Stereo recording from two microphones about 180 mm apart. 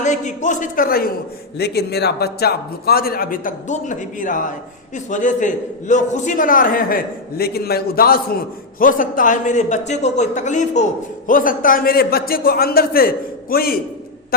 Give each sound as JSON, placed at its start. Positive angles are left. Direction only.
{"t": 0.0, "sound": "a man's voice", "side_deg": 40}